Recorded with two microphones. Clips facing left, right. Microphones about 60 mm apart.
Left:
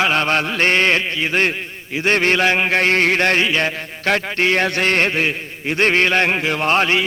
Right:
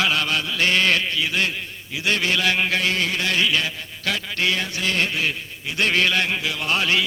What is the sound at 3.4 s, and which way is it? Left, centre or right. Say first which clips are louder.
Mantra: left 4 dB; left.